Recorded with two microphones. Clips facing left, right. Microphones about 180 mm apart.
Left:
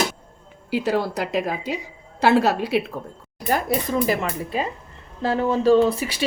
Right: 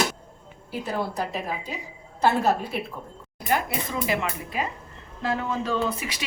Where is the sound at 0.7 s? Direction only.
85° left.